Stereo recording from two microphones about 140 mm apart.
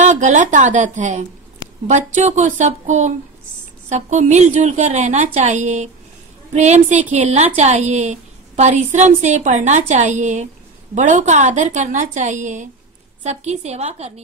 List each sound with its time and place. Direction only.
0.0 s a woman's voice: 60° right (ahead or behind)